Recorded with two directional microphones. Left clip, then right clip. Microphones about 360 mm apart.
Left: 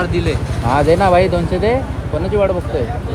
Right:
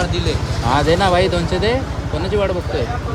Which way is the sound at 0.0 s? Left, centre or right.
Centre.